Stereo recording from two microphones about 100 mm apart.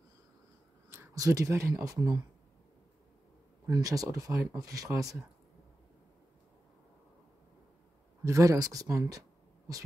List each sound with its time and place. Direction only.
0.8 s speech: 25° right (ahead or behind)
3.7 s speech: 35° right (ahead or behind)
8.2 s speech: 30° right (ahead or behind)